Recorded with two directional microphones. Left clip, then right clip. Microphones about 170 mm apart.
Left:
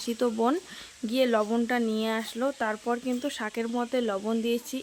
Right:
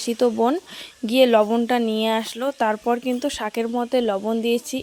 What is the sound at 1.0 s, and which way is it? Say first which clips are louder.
Speech: right 9 dB; 35° right (ahead or behind).